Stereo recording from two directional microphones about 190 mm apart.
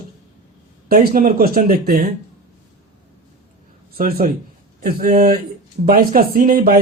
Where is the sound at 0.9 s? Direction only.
50° right (ahead or behind).